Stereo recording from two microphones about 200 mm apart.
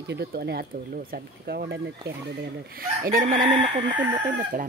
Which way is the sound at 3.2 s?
45° right (ahead or behind).